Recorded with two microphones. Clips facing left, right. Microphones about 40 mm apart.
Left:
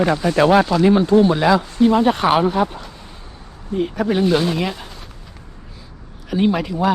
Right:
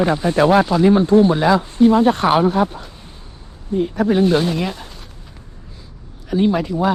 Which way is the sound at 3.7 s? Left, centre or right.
Left.